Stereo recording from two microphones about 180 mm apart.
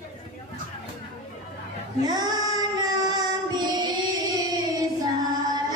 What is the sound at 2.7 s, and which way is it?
Music, 20° right (ahead or behind).